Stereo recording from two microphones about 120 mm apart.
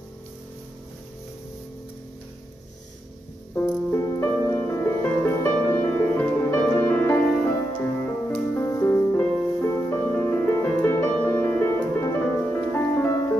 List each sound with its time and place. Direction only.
3.5 s music: 25° left (ahead or behind)